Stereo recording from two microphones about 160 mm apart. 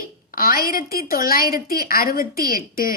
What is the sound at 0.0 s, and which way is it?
A woman's voice, 65° left (ahead or behind).